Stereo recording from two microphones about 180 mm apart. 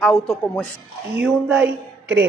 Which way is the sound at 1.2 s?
10° right (ahead or behind).